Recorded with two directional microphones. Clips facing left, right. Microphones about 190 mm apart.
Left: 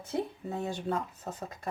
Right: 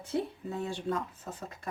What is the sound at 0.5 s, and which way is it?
Speech, 40° left (ahead or behind).